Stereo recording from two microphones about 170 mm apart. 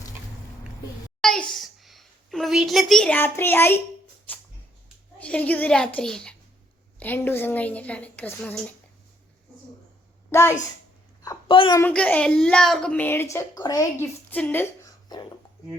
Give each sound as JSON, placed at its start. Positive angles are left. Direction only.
{"t": 1.2, "sound": "a child's voice", "side_deg": 5}
{"t": 5.2, "sound": "a woman's voice", "side_deg": 10}
{"t": 11.4, "sound": "a woman's voice", "side_deg": 30}
{"t": 11.8, "sound": "a woman's voice", "side_deg": 10}